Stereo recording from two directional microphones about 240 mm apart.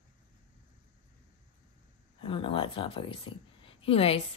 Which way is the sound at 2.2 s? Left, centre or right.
Left.